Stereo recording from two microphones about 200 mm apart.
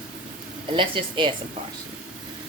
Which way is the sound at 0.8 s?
25° right (ahead or behind).